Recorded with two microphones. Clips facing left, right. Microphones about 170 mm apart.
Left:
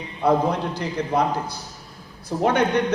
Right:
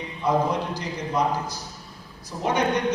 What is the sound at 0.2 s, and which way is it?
A man's voice, 60° left (ahead or behind).